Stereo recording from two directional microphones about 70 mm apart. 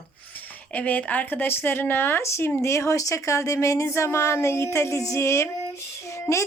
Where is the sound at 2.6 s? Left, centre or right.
Left.